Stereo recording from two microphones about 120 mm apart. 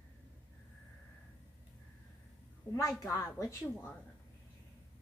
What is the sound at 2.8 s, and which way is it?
A woman's voice, 30° left (ahead or behind).